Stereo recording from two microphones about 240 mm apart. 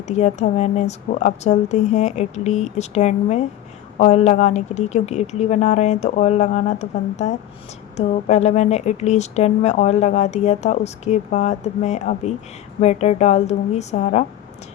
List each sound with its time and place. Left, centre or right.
0.1 s speech: left